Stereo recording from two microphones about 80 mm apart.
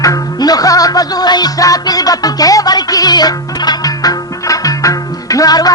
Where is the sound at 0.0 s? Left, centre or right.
Left.